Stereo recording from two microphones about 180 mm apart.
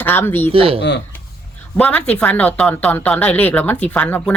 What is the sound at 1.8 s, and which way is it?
Speech, 10° left (ahead or behind).